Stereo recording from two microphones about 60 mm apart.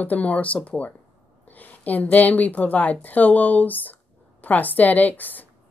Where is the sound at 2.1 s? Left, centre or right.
Left.